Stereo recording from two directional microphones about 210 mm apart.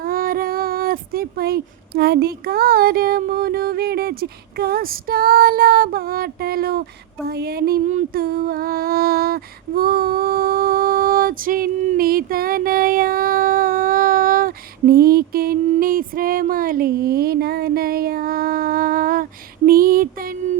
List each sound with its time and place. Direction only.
0.0 s speech: 45° right (ahead or behind)
7.3 s music: 50° right (ahead or behind)